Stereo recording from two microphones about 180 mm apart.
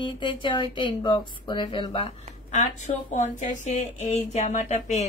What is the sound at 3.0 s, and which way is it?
A woman's voice, 45° left (ahead or behind).